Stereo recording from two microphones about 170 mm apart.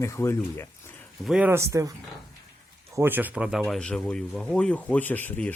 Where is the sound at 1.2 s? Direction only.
5° right (ahead or behind).